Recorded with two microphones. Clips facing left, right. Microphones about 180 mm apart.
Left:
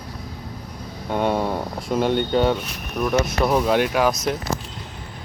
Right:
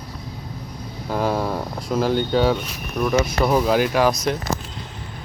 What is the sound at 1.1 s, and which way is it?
Speech, centre (ahead or behind).